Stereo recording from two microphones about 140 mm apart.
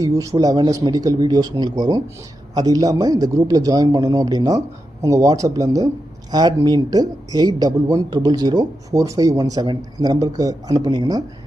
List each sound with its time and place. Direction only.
0.0 s speech: 25° right (ahead or behind)